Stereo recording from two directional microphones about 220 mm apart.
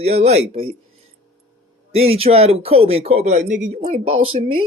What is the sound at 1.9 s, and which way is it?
Speech, 25° right (ahead or behind).